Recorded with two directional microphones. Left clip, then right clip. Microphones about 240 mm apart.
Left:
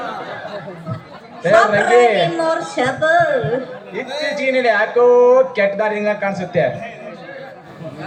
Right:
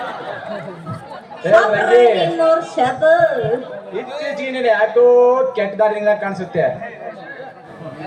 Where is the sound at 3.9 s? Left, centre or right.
Left.